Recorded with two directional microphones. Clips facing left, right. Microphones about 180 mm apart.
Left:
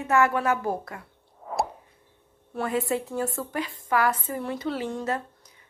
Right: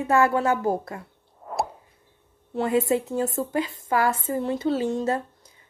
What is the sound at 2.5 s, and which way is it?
A woman's voice, 25° right (ahead or behind).